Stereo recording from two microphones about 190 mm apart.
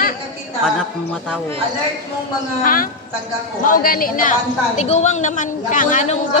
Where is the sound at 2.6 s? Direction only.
45° left (ahead or behind).